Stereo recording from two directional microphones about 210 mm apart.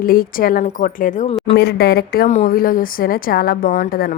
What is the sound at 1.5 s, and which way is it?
A woman's voice, 50° left (ahead or behind).